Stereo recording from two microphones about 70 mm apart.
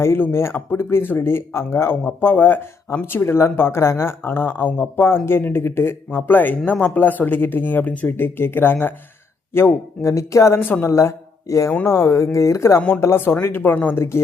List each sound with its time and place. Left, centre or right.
0.0 s speech: left
2.0 s speech: left
10.6 s speech: left
10.8 s speech: left